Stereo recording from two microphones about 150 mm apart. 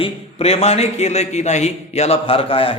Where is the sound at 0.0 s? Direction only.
40° left (ahead or behind).